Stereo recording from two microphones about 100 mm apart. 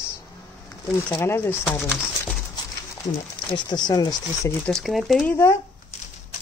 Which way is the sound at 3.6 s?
45° left (ahead or behind).